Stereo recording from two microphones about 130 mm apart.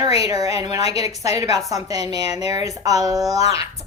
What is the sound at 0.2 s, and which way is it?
A woman's voice, 30° right (ahead or behind).